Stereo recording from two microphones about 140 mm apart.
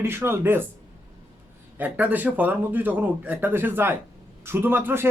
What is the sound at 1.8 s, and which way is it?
Speech, 10° right (ahead or behind).